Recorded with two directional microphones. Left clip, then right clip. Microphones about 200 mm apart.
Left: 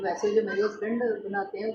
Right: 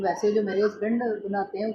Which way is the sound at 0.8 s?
55° right (ahead or behind).